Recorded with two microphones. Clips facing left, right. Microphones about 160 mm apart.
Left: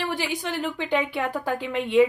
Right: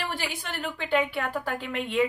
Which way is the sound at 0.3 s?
15° left (ahead or behind).